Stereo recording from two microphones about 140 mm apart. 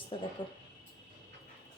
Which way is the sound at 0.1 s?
40° left (ahead or behind).